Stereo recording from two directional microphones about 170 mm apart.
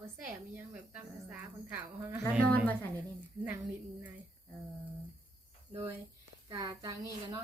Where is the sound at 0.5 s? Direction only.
10° right (ahead or behind).